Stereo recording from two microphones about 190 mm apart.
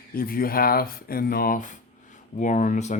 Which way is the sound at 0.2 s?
50° left (ahead or behind).